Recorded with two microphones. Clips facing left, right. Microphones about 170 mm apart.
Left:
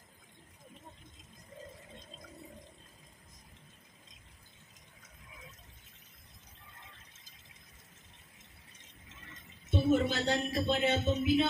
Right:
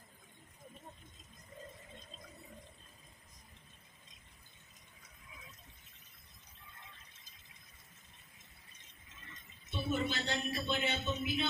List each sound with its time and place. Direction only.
9.7 s speech: 45° left (ahead or behind)